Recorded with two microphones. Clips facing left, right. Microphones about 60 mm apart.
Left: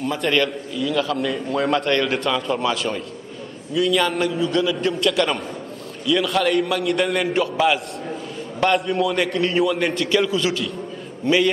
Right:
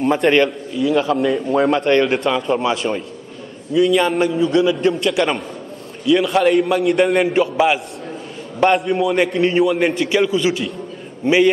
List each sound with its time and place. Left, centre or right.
0.0 s a man's voice: right
0.4 s a man's voice: centre
6.4 s a man's voice: centre
7.5 s a man's voice: centre
8.7 s a man's voice: centre
11.2 s a man's voice: centre